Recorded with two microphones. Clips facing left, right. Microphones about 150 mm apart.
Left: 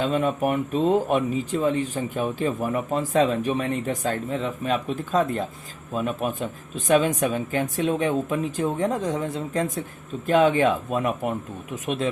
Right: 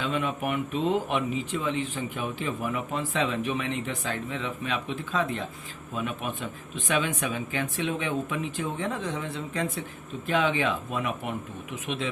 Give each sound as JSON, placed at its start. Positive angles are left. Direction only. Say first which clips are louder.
{"t": 0.0, "sound": "speech", "louder": "left 6 dB", "side_deg": 40}